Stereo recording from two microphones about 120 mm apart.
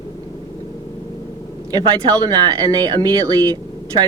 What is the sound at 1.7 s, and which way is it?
Speech, 35° right (ahead or behind).